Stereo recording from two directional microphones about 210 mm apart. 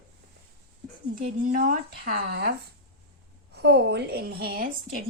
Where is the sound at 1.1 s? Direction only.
40° right (ahead or behind).